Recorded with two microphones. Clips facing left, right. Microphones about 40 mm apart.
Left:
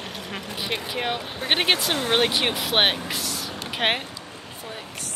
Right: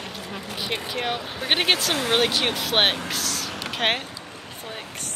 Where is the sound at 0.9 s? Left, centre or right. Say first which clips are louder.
Even; centre.